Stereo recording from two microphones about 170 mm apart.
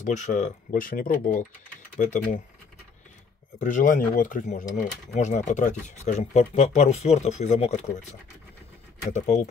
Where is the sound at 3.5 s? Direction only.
50° left (ahead or behind).